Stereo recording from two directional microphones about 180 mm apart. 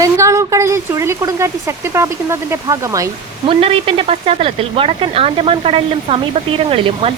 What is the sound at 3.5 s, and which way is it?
Speech, 30° right (ahead or behind).